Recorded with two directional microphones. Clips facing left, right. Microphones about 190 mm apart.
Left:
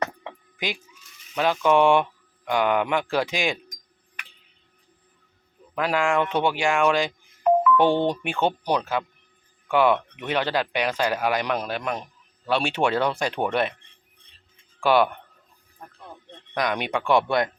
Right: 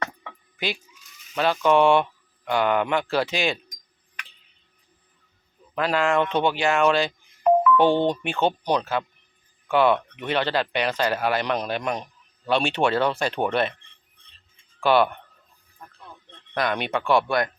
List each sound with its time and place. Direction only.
1.4 s speech: 15° left (ahead or behind)
5.7 s speech: 10° left (ahead or behind)
14.8 s speech: 10° left (ahead or behind)
16.6 s speech: 15° left (ahead or behind)